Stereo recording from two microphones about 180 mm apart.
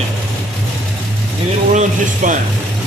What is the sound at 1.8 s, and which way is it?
Speech, 45° right (ahead or behind).